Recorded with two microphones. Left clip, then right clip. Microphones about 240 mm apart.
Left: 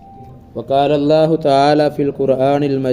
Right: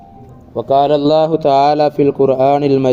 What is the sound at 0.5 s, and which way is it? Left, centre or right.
A man's voice, centre.